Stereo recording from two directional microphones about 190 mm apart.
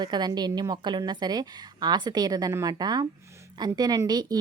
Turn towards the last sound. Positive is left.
turn(degrees=-20)  # may be behind; listen again after turning